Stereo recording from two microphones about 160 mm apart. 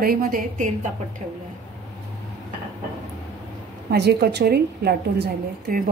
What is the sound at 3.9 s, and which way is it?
A woman's voice, 90° right.